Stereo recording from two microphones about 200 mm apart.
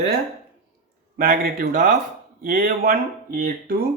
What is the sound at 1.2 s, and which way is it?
Speech, 45° right (ahead or behind).